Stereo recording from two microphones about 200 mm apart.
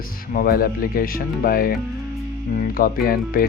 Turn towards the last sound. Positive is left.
turn(degrees=45)  # may be behind; listen again after turning